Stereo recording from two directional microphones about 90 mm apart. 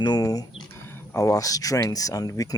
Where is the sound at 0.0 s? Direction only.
45° left (ahead or behind).